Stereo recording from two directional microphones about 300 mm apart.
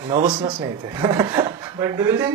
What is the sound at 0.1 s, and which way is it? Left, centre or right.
Speech, centre.